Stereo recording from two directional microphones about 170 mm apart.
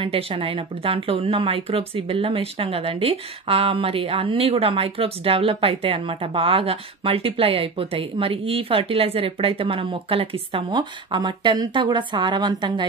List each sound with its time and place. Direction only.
0.0 s a woman's voice: 30° right (ahead or behind)